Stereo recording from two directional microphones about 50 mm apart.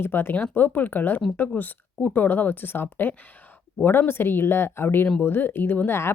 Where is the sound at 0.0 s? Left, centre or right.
Left.